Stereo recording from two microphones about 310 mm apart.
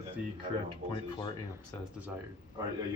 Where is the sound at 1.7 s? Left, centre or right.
Centre.